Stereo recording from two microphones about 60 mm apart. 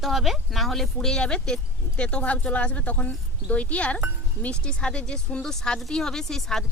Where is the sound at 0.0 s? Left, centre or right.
Centre.